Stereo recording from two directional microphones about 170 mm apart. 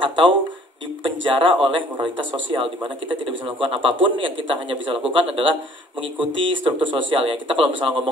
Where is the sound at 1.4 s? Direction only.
30° right (ahead or behind).